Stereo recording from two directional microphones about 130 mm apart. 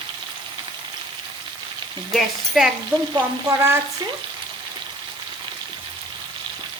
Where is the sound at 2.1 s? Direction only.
Centre (ahead or behind).